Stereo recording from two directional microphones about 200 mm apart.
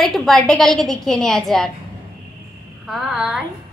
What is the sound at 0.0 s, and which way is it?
A woman's voice, centre (ahead or behind).